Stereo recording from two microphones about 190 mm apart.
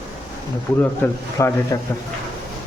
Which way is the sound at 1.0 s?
10° left (ahead or behind).